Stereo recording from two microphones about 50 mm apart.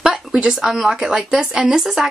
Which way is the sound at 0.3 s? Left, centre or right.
Centre.